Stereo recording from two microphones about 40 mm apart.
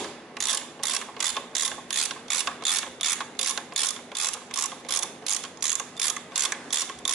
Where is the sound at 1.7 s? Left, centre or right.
Centre.